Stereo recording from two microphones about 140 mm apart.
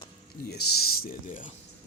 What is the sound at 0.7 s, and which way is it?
Speech, 90° left.